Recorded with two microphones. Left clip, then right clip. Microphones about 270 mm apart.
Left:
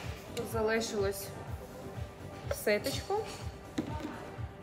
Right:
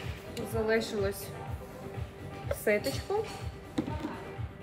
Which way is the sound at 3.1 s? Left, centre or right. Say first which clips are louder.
Right 2 dB; centre.